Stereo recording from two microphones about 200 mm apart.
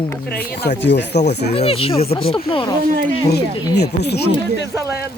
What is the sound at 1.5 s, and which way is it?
Speech, 30° left (ahead or behind).